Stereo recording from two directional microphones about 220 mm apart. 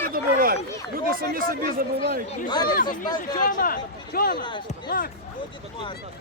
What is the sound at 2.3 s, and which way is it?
Speech, 20° left (ahead or behind).